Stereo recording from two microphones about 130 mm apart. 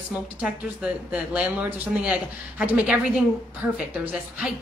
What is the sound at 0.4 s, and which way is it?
A woman's voice, 10° right (ahead or behind).